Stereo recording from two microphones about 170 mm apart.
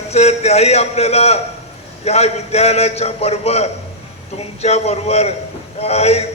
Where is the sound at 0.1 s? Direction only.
40° left (ahead or behind).